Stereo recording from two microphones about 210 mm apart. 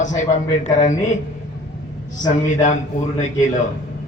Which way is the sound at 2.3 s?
35° left (ahead or behind).